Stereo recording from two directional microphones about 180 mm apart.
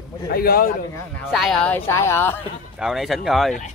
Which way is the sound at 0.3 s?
55° left (ahead or behind).